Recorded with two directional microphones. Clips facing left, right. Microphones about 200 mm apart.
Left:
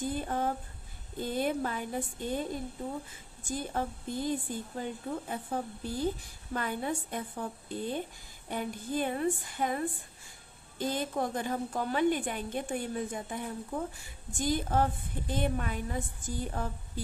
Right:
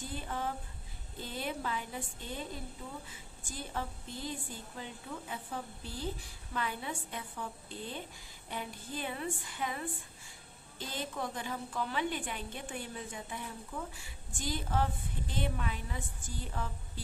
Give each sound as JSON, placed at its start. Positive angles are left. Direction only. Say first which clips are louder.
{"t": 0.1, "sound": "a woman's voice", "louder": "left 6 dB", "side_deg": 45}